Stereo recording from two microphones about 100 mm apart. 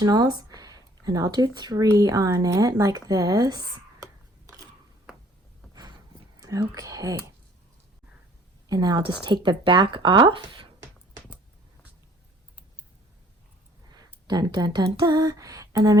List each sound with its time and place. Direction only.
0.0 s speech: 40° right (ahead or behind)
6.7 s speech: 35° right (ahead or behind)
8.7 s speech: 45° right (ahead or behind)
14.3 s speech: 45° right (ahead or behind)